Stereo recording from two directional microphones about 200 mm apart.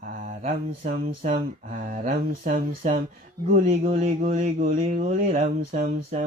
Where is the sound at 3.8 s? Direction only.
30° right (ahead or behind).